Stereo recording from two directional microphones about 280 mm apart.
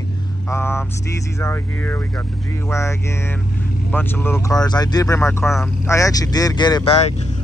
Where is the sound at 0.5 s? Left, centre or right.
Centre.